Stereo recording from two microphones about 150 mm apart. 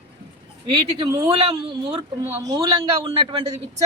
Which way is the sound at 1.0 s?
25° right (ahead or behind).